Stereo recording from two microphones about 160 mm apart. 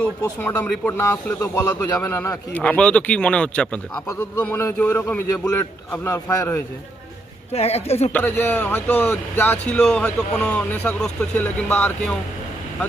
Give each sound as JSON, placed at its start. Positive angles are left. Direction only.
{"t": 0.2, "sound": "a man's voice", "side_deg": 15}
{"t": 2.5, "sound": "speech", "side_deg": 10}
{"t": 7.5, "sound": "a woman's voice", "side_deg": 40}
{"t": 8.1, "sound": "speech", "side_deg": 10}